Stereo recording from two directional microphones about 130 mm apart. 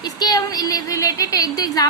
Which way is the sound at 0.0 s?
30° left (ahead or behind).